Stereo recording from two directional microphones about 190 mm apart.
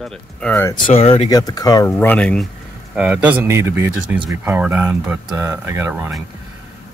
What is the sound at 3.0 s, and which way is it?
Speech, 10° right (ahead or behind).